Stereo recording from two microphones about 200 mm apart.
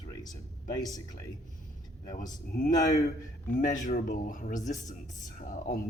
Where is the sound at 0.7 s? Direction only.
15° left (ahead or behind).